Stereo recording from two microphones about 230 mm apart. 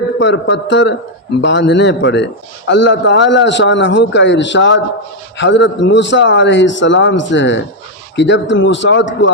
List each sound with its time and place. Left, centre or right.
0.2 s a man's voice: left